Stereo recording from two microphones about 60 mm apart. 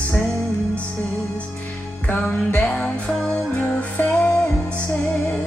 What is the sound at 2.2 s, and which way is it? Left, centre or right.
Music, centre.